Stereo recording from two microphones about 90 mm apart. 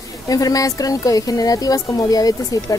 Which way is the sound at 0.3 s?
40° left (ahead or behind).